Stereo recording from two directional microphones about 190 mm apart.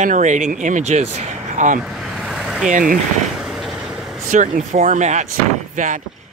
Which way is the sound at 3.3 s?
Centre (ahead or behind).